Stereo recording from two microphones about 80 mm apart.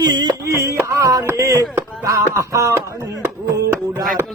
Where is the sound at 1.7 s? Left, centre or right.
Right.